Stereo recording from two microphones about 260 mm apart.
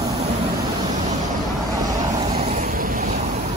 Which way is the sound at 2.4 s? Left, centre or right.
Right.